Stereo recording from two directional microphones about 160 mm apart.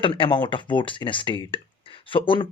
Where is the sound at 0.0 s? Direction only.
30° left (ahead or behind).